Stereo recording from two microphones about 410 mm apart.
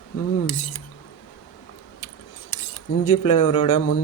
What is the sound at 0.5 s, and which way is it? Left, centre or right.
Speech, left.